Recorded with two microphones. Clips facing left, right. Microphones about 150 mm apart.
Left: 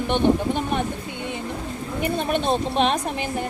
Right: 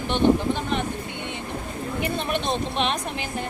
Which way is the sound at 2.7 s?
45° left (ahead or behind).